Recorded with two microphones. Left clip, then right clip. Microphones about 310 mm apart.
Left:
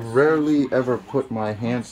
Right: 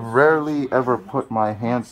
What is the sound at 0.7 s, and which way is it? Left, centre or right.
Speech, centre.